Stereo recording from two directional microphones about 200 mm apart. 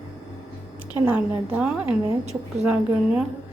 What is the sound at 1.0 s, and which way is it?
Speech, 5° right (ahead or behind).